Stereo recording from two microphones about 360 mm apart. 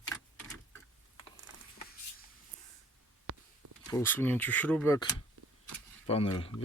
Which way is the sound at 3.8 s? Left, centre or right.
Centre.